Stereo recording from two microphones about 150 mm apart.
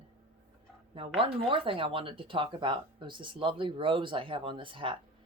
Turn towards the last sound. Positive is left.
turn(degrees=-35)  # may be behind; listen again after turning